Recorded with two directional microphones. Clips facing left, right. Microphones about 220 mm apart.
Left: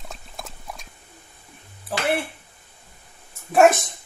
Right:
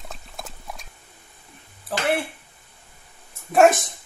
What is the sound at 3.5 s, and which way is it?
Dog, centre (ahead or behind).